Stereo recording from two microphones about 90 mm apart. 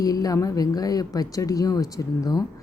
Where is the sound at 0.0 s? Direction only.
45° left (ahead or behind).